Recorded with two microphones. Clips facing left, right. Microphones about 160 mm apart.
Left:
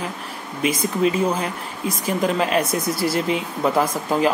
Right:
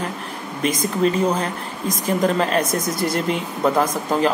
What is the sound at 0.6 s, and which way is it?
Speech, 10° left (ahead or behind).